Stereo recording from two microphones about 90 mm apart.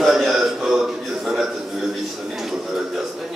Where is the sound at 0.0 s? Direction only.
5° right (ahead or behind).